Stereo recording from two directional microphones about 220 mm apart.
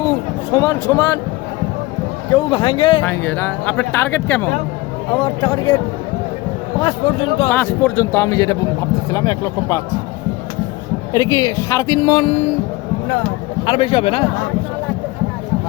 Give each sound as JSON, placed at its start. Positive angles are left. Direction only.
{"t": 0.5, "sound": "speech", "side_deg": 15}
{"t": 2.3, "sound": "a man's voice", "side_deg": 20}
{"t": 3.0, "sound": "a man's voice", "side_deg": 10}
{"t": 6.7, "sound": "a man's voice", "side_deg": 20}
{"t": 7.5, "sound": "speech", "side_deg": 10}
{"t": 11.1, "sound": "speech", "side_deg": 15}
{"t": 13.7, "sound": "a man's voice", "side_deg": 25}